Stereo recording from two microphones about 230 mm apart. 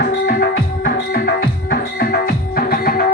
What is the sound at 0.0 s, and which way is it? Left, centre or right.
Music, left.